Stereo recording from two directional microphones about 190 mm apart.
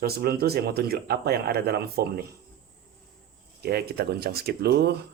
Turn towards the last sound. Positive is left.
turn(degrees=-60)  # may be behind; listen again after turning